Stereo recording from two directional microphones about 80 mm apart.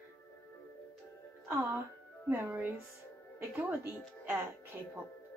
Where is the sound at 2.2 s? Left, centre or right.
Right.